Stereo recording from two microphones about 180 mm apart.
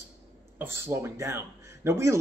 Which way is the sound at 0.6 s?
10° right (ahead or behind).